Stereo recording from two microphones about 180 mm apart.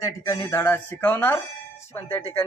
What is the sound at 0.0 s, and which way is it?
Speech, 15° left (ahead or behind).